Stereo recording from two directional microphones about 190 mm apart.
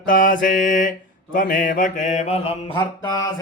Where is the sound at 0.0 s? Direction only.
45° left (ahead or behind).